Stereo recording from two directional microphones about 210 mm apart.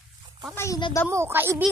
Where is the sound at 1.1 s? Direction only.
10° right (ahead or behind).